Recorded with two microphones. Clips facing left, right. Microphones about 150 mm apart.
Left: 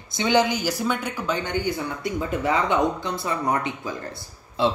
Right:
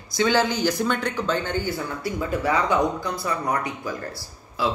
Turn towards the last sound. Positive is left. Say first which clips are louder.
# left 3 dB
turn(degrees=25)  # may be behind; listen again after turning